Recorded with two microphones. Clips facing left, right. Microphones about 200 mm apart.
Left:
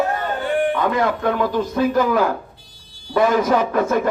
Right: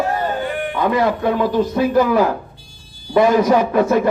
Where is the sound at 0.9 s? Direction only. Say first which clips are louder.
Right 3 dB; 10° right (ahead or behind).